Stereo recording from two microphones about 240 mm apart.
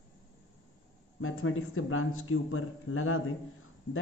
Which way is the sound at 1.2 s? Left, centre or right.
Left.